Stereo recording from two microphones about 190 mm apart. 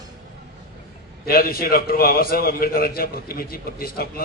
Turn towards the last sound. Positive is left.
turn(degrees=50)  # may be behind; listen again after turning